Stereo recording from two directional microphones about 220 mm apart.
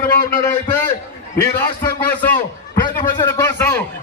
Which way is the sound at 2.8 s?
20° left (ahead or behind).